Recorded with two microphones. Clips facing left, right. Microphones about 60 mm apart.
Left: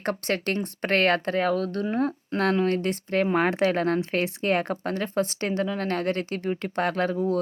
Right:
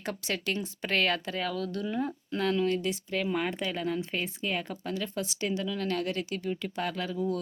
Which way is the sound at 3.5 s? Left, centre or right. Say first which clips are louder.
Left 10 dB; left.